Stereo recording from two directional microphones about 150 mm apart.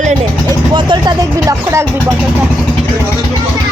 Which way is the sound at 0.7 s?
30° right (ahead or behind).